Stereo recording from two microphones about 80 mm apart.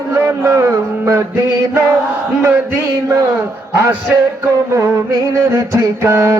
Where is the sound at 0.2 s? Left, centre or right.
Right.